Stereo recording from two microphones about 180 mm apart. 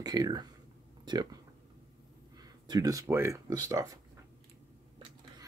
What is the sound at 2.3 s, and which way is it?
Speech, 20° right (ahead or behind).